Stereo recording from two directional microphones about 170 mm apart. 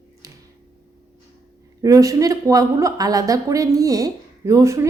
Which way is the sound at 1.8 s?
20° right (ahead or behind).